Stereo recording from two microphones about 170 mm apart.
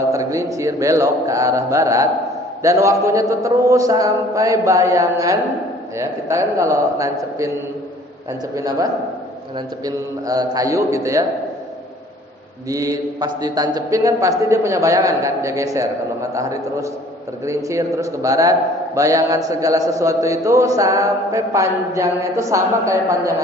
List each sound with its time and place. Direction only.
0.1 s a man's voice: 20° right (ahead or behind)
8.5 s a man's voice: 20° right (ahead or behind)
12.6 s a man's voice: 20° right (ahead or behind)